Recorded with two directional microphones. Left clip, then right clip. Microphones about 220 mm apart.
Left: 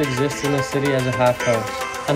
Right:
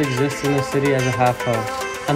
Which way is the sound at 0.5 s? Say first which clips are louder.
Right 3 dB; 5° left (ahead or behind).